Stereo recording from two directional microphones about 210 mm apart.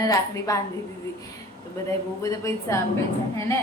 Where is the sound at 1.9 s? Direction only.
15° left (ahead or behind).